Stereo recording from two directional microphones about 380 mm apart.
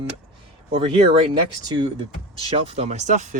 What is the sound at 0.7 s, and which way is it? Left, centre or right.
Speech, centre.